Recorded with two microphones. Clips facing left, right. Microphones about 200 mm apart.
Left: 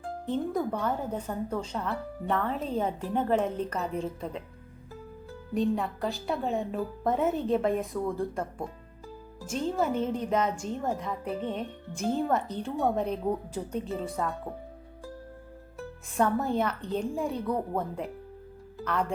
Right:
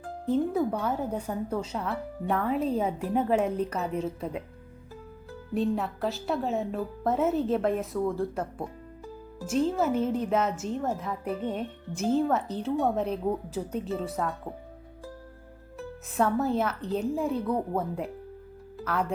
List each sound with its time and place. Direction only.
0.3 s a woman's voice: 5° right (ahead or behind)
5.5 s speech: 5° right (ahead or behind)
16.1 s speech: centre (ahead or behind)